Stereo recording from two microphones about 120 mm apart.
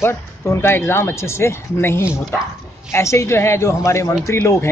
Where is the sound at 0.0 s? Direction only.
20° left (ahead or behind).